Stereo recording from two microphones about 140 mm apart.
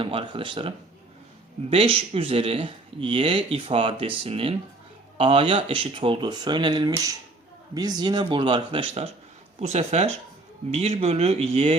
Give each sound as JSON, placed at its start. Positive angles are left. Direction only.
{"t": 0.0, "sound": "speech", "side_deg": -40}
{"t": 1.7, "sound": "speech", "side_deg": -45}
{"t": 9.6, "sound": "speech", "side_deg": -50}